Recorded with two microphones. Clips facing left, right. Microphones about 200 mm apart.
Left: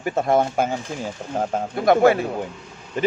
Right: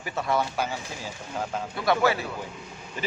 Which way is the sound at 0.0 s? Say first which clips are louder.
Left 8 dB; 50° left (ahead or behind).